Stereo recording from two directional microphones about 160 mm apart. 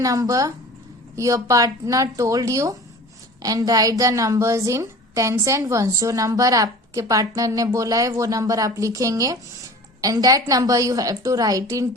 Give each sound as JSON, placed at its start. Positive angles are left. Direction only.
{"t": 0.0, "sound": "a woman's voice", "side_deg": -20}